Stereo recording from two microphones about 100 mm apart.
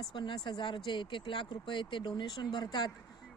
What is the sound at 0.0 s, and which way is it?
Speech, 50° left (ahead or behind).